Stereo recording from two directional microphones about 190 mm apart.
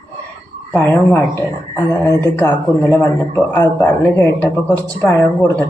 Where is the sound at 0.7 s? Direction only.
10° left (ahead or behind).